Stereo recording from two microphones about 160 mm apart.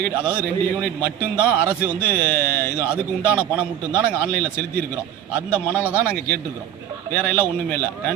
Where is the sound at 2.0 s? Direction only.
10° left (ahead or behind).